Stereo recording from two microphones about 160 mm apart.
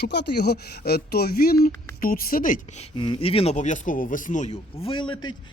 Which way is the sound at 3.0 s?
35° left (ahead or behind).